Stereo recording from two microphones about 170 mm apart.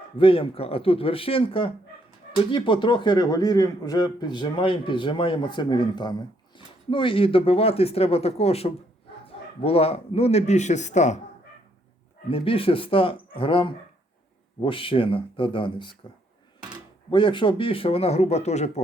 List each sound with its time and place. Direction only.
0.2 s a man's voice: 30° left (ahead or behind)
12.3 s speech: 30° left (ahead or behind)
17.1 s speech: 30° left (ahead or behind)